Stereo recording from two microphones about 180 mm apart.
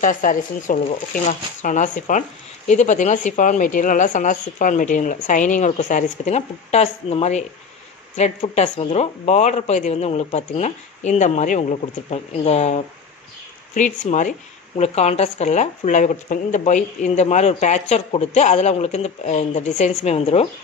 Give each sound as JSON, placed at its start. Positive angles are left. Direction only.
{"t": 0.0, "sound": "speech", "side_deg": 50}